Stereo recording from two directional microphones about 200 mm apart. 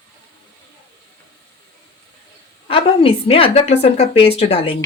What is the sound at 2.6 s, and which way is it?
Speech, 25° left (ahead or behind).